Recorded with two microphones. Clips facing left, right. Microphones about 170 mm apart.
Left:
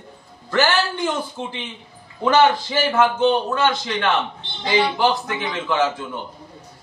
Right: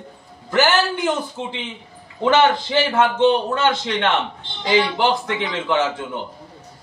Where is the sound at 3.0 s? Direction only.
25° right (ahead or behind).